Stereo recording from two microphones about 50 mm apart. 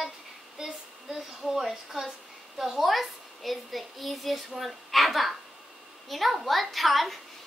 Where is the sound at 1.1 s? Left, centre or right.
Centre.